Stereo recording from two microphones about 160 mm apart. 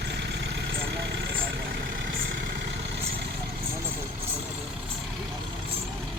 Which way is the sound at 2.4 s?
90° right.